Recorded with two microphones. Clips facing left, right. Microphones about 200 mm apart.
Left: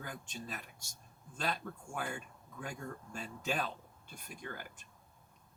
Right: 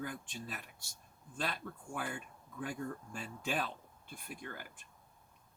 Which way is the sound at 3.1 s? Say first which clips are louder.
Left 3 dB; 45° left (ahead or behind).